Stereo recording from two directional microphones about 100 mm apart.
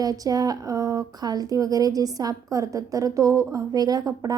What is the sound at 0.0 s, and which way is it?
Speech, 40° right (ahead or behind).